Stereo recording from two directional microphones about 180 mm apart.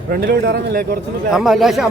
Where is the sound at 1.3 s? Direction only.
Centre (ahead or behind).